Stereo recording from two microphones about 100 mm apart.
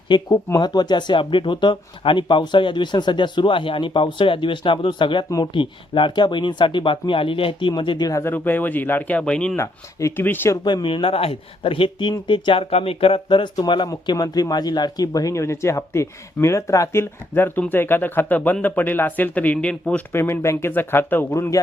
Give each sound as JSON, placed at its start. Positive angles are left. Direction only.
{"t": 0.1, "sound": "speech", "side_deg": 50}
{"t": 7.8, "sound": "speech", "side_deg": 50}
{"t": 8.2, "sound": "speech", "side_deg": 20}
{"t": 9.6, "sound": "speech", "side_deg": 25}
{"t": 10.6, "sound": "speech", "side_deg": 50}
{"t": 20.1, "sound": "speech", "side_deg": 25}